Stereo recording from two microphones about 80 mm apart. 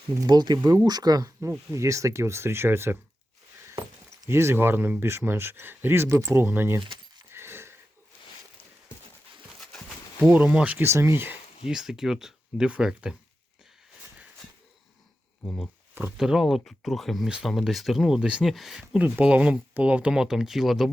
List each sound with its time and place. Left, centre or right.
0.3 s speech: right
1.4 s speech: right
4.3 s speech: right
7.3 s dog: right
9.6 s horse: centre
10.2 s speech: centre
10.8 s speech: right
11.7 s speech: centre
15.4 s speech: left
16.1 s speech: centre